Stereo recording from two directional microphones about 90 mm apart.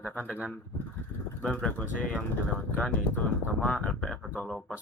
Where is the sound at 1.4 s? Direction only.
10° left (ahead or behind).